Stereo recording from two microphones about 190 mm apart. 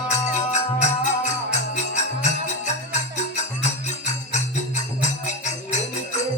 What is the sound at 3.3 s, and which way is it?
Music, 40° left (ahead or behind).